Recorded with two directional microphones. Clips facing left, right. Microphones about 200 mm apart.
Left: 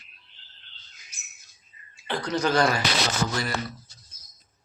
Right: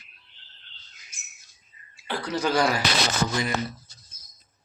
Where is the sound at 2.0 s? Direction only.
5° right (ahead or behind).